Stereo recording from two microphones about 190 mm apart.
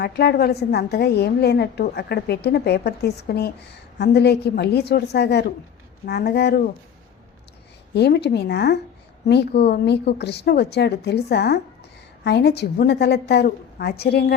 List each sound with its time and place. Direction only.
0.0 s a woman's voice: 60° left (ahead or behind)
7.9 s a woman's voice: 60° left (ahead or behind)